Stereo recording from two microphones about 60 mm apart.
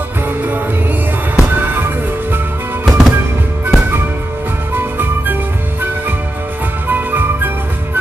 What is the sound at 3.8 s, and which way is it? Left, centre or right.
Music, right.